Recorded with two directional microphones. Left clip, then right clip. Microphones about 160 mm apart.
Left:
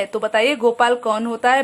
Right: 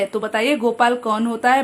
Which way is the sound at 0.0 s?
15° left (ahead or behind).